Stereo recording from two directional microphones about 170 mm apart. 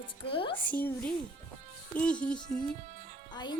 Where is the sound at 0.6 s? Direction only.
10° left (ahead or behind).